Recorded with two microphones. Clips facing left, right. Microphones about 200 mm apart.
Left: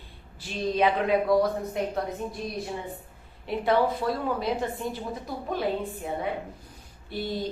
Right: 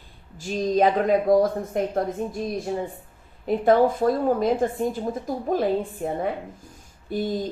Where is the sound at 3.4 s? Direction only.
45° right (ahead or behind).